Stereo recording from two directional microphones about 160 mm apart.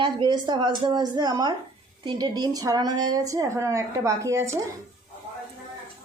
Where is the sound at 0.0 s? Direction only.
30° right (ahead or behind).